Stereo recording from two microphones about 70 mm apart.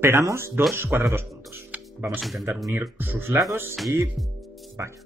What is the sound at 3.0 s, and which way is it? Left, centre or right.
Speech, right.